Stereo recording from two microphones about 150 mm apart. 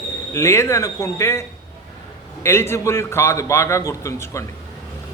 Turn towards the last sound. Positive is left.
turn(degrees=20)  # may be behind; listen again after turning